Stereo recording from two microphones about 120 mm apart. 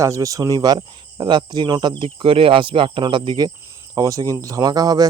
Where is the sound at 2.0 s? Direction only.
50° right (ahead or behind).